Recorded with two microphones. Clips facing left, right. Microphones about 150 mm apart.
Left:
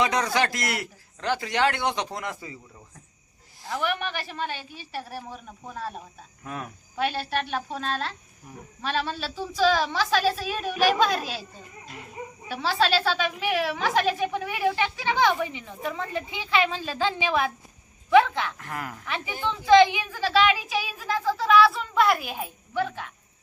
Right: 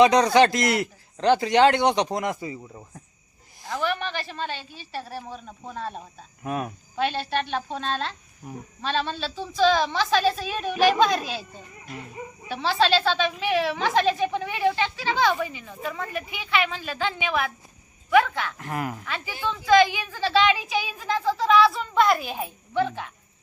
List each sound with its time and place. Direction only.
0.0 s a man's voice: 20° right (ahead or behind)
3.7 s a woman's voice: 15° left (ahead or behind)
6.4 s a man's voice: 20° right (ahead or behind)
6.9 s a woman's voice: 5° left (ahead or behind)
12.5 s a woman's voice: 5° left (ahead or behind); by 18.5 s 20° left (ahead or behind)
18.5 s a man's voice: 20° right (ahead or behind)
19.0 s a woman's voice: 20° left (ahead or behind)
20.1 s speech: 10° left (ahead or behind)